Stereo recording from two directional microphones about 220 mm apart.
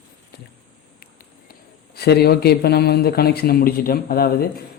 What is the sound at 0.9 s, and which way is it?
Speech, 45° left (ahead or behind).